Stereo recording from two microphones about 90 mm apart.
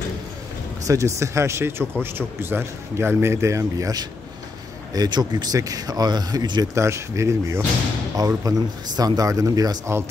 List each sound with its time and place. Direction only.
0.8 s a man's voice: 35° right (ahead or behind)
4.9 s speech: 50° right (ahead or behind)
6.7 s speech: 30° right (ahead or behind)
8.5 s speech: 45° right (ahead or behind)